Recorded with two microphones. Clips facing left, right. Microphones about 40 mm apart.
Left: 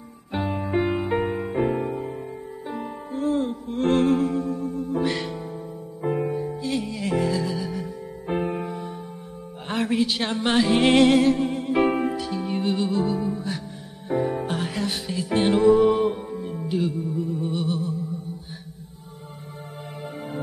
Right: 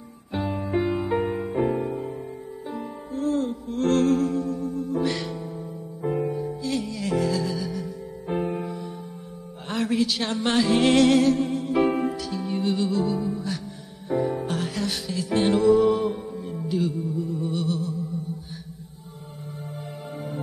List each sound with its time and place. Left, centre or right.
0.3 s music: left
2.7 s music: left
14.6 s music: centre
15.5 s music: left
16.3 s music: centre